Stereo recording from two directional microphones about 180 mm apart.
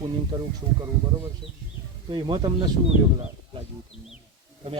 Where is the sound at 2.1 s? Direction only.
25° right (ahead or behind).